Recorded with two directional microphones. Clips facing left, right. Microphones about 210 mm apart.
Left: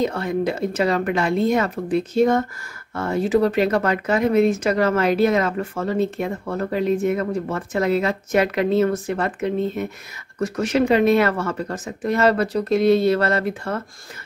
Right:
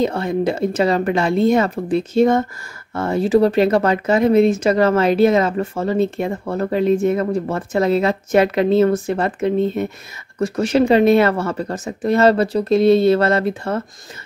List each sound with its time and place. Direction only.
0.0 s speech: 30° right (ahead or behind)